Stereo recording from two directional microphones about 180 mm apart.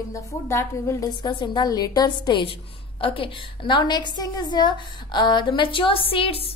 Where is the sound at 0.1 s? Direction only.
15° left (ahead or behind).